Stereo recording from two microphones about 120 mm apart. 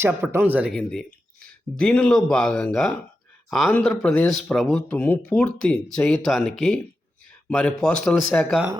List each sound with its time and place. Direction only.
0.0 s speech: 20° right (ahead or behind)
0.7 s speech: centre (ahead or behind)
4.9 s speech: 15° left (ahead or behind)